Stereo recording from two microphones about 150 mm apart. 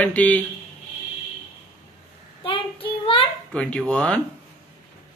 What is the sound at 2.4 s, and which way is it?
Child singing, 35° left (ahead or behind).